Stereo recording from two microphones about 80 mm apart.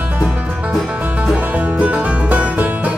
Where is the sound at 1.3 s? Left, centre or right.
Centre.